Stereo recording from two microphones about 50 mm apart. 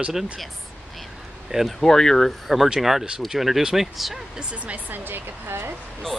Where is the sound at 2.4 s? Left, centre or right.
Centre.